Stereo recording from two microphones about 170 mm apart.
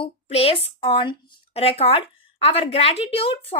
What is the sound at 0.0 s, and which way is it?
A woman's voice, 35° left (ahead or behind).